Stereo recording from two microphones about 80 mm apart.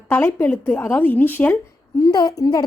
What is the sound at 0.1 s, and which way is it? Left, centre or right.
A woman's voice, left.